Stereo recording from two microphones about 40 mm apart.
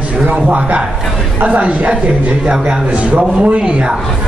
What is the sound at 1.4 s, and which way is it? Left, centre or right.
A man's voice, right.